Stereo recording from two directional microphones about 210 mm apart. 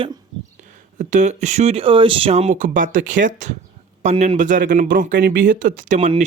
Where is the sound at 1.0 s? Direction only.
35° right (ahead or behind).